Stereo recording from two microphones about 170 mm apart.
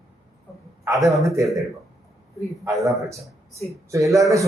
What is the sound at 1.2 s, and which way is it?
Speech, 20° right (ahead or behind).